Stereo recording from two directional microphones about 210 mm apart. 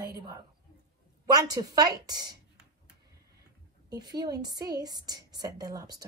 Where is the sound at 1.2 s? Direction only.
20° right (ahead or behind).